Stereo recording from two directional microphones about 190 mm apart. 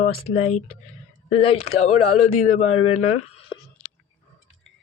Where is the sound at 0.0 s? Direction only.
35° left (ahead or behind).